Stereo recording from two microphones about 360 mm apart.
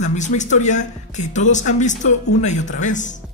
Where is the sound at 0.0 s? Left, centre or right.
Centre.